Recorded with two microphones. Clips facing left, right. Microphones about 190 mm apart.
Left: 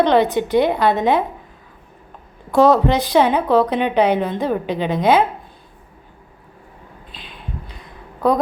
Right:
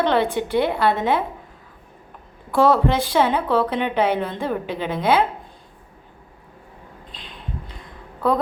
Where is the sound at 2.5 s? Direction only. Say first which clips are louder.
Left 3 dB; 20° left (ahead or behind).